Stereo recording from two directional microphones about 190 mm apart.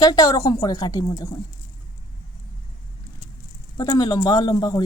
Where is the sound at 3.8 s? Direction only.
20° left (ahead or behind).